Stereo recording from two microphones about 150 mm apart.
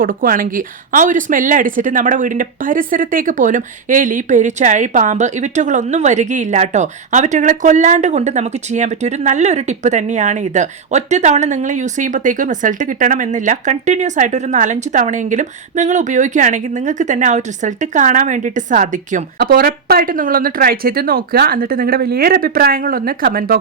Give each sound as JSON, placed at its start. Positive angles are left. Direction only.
{"t": 0.0, "sound": "speech", "side_deg": -70}